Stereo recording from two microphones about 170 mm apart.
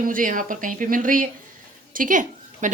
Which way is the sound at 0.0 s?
55° right (ahead or behind).